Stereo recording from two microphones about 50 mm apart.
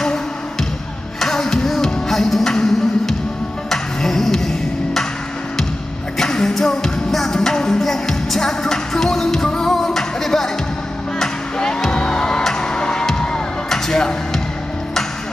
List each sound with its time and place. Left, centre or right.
1.2 s music: centre
6.1 s music: centre
13.7 s a sound: centre